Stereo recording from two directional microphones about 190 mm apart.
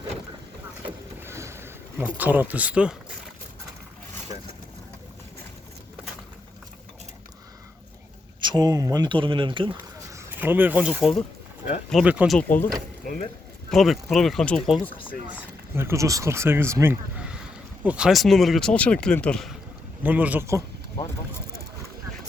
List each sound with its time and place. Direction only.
1.2 s boat: 15° right (ahead or behind)
2.1 s speech: 10° right (ahead or behind)
8.4 s speech: 20° right (ahead or behind)
10.2 s speech: 10° right (ahead or behind)
12.4 s speech: 10° left (ahead or behind)
13.7 s speech: centre (ahead or behind)
15.3 s speech: 10° right (ahead or behind)
20.0 s speech: 10° right (ahead or behind)